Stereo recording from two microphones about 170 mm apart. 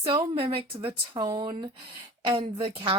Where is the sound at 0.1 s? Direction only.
30° right (ahead or behind).